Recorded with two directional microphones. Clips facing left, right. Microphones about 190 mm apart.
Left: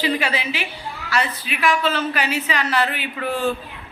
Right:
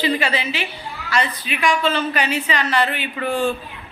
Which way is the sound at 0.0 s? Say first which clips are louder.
Right 1 dB; 10° left (ahead or behind).